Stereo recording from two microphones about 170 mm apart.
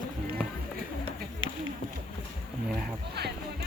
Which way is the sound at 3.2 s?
70° right (ahead or behind).